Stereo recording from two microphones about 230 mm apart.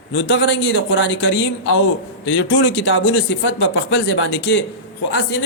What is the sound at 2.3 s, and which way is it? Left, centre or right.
A man's voice, left.